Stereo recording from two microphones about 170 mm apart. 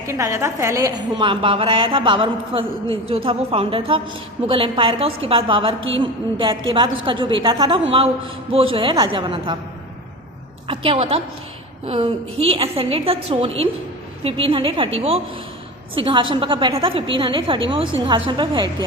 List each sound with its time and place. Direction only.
0.1 s a woman's voice: 15° right (ahead or behind)
10.7 s a woman's voice: 30° right (ahead or behind)
16.0 s a woman's voice: 30° right (ahead or behind)